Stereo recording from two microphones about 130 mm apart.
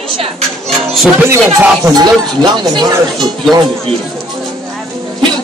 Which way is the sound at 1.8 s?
30° right (ahead or behind).